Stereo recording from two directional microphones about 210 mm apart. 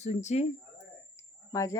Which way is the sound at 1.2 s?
15° left (ahead or behind).